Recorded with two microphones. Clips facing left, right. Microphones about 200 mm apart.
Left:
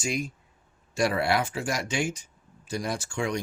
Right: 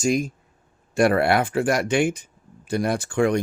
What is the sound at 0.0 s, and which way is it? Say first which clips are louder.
Speech: right 9 dB; 45° right (ahead or behind).